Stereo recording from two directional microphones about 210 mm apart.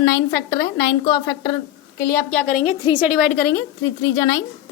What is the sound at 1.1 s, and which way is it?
A woman's voice, 15° left (ahead or behind).